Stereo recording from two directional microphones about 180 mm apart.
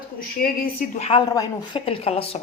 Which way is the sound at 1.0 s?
35° left (ahead or behind).